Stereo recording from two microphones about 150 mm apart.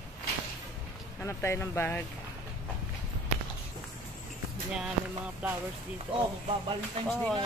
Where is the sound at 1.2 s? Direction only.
20° left (ahead or behind).